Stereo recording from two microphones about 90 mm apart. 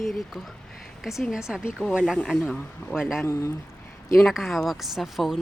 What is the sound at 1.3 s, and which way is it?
Speech, 5° right (ahead or behind).